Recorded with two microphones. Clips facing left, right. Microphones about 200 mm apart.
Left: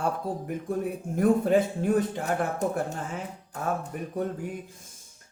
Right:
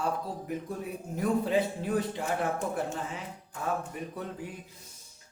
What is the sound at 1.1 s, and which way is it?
Speech, 50° left (ahead or behind).